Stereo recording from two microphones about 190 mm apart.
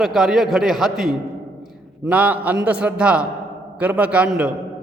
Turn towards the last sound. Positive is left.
turn(degrees=-5)  # may be behind; listen again after turning